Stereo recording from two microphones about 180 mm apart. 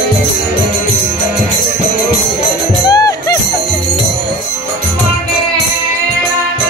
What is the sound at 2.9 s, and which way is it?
Music, 20° left (ahead or behind).